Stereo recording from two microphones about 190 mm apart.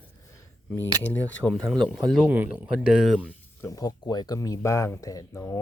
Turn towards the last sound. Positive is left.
turn(degrees=15)  # may be behind; listen again after turning